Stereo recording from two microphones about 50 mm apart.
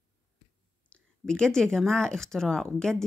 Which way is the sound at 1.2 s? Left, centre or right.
Centre.